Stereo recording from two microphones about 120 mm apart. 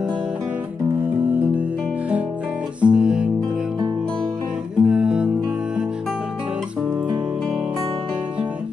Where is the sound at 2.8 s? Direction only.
10° right (ahead or behind).